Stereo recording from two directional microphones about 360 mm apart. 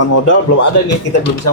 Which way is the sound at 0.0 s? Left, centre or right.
Left.